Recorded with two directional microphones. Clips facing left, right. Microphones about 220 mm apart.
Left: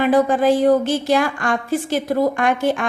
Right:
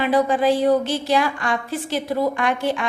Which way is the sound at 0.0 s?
50° left (ahead or behind).